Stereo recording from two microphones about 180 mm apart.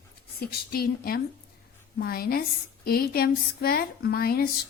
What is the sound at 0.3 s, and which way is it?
Speech, 60° left (ahead or behind).